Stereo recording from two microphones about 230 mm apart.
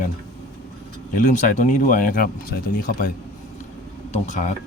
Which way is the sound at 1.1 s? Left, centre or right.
Left.